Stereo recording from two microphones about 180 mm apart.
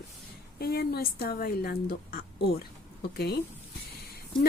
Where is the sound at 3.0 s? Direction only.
60° left (ahead or behind).